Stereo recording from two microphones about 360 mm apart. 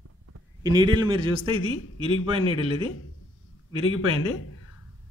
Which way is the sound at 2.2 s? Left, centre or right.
Centre.